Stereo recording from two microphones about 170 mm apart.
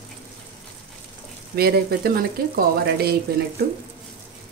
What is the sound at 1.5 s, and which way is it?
Speech, 70° right (ahead or behind).